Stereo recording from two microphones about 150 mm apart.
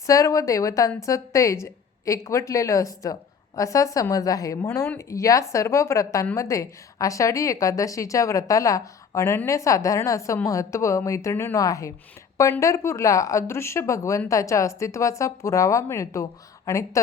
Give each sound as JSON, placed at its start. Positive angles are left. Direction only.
{"t": 0.0, "sound": "a woman's voice", "side_deg": 20}